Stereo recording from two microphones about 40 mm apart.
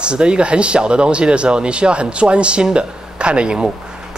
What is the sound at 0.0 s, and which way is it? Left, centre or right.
Speech, right.